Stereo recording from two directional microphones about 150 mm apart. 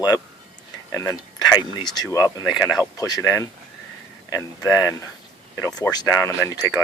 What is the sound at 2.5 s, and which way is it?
Speech, 5° right (ahead or behind).